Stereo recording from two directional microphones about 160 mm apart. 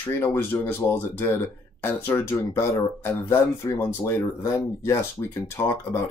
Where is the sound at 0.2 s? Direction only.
15° left (ahead or behind).